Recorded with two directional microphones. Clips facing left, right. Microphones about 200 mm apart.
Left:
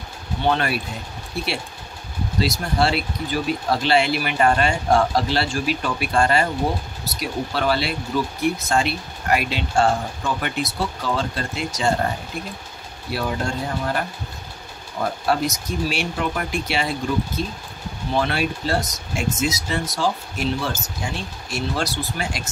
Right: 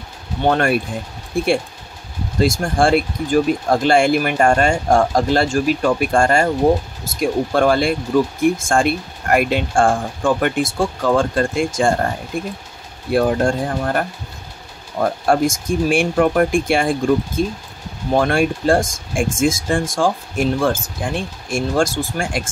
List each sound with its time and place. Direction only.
0.4 s speech: 50° right (ahead or behind)
13.1 s speech: 50° right (ahead or behind)